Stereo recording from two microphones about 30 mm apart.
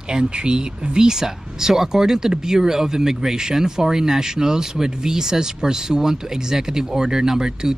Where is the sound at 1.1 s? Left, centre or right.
Centre.